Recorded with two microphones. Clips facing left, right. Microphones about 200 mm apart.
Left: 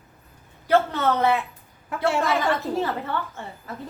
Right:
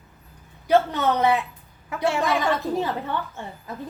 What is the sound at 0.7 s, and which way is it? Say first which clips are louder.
Speech: right 1 dB; 15° right (ahead or behind).